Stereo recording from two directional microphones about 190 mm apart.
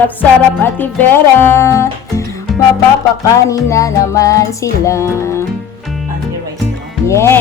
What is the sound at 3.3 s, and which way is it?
Music, 15° left (ahead or behind).